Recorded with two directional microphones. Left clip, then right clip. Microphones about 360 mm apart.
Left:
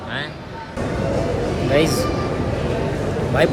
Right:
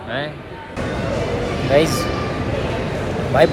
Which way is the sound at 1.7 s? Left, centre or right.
Centre.